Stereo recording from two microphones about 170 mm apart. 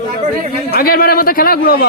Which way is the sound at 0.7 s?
60° left (ahead or behind).